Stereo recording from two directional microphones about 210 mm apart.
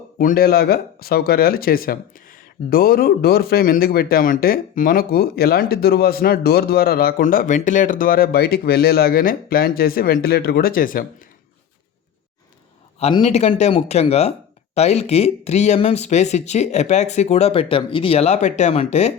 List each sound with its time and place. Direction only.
0.2 s speech: 45° left (ahead or behind)
13.0 s speech: 30° left (ahead or behind)